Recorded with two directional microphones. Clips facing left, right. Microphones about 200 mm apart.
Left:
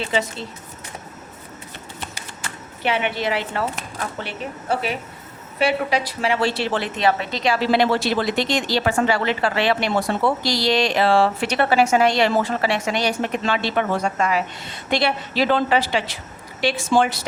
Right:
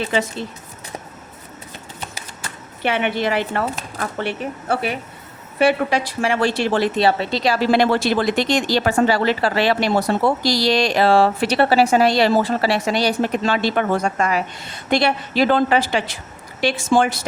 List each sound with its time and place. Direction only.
2.8 s a woman's voice: 50° right (ahead or behind)